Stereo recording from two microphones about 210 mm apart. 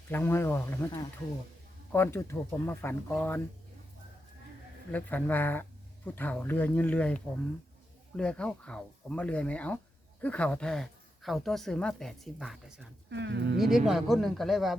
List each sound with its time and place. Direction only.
0.1 s speech: 10° left (ahead or behind)
4.9 s speech: 5° left (ahead or behind)
13.1 s speech: 55° right (ahead or behind)
13.6 s speech: centre (ahead or behind)